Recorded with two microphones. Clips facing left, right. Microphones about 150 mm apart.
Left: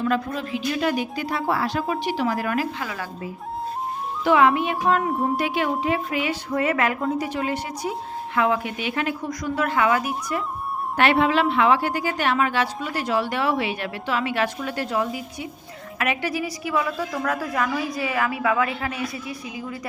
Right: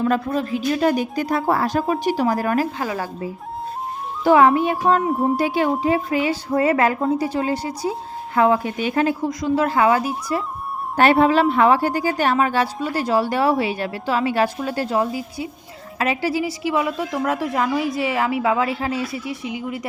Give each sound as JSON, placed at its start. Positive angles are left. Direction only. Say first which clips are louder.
{"t": 0.0, "sound": "a woman's voice", "louder": "right 4 dB", "side_deg": -40}
{"t": 10.9, "sound": "a woman's voice", "louder": "right 4 dB", "side_deg": -40}